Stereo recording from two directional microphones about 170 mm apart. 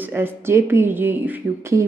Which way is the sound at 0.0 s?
10° right (ahead or behind).